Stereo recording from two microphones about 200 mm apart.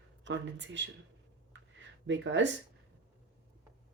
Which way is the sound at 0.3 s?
65° right (ahead or behind).